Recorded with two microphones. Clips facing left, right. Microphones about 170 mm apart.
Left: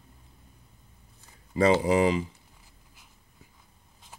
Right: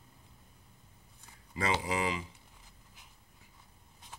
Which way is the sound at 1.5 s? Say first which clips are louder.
Left 11 dB; 35° left (ahead or behind).